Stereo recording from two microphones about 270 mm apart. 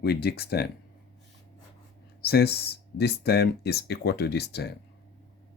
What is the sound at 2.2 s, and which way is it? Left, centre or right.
Speech, left.